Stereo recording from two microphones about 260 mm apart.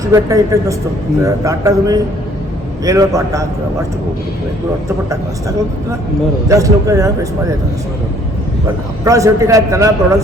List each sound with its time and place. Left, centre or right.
0.0 s a man's voice: centre
6.5 s a man's voice: centre
9.0 s a man's voice: centre